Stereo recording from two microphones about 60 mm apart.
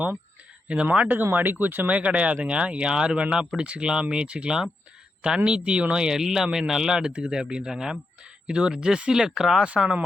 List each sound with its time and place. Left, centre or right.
0.7 s speech: right
1.0 s speech: right; by 10.0 s centre